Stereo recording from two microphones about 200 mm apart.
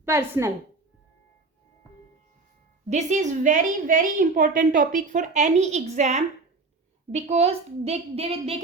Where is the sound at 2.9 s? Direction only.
35° right (ahead or behind).